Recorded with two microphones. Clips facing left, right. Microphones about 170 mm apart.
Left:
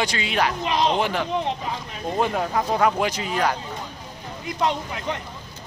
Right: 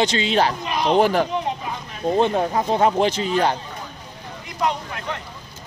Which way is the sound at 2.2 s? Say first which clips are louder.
Right 3 dB; 25° right (ahead or behind).